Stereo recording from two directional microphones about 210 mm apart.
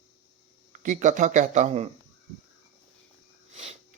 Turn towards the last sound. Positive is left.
turn(degrees=-30)  # may be behind; listen again after turning